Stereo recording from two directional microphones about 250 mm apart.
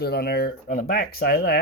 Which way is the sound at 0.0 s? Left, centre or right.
Left.